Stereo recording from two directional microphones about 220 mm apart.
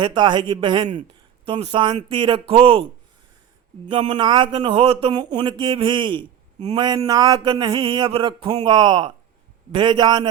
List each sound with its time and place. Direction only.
0.0 s speech: 20° right (ahead or behind)
3.8 s speech: 20° right (ahead or behind)